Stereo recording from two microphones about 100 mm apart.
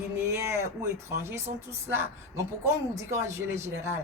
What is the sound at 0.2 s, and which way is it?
Speech, 30° right (ahead or behind).